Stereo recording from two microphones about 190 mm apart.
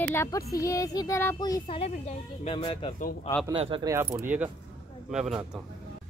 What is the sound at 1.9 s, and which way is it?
Speech, 35° left (ahead or behind).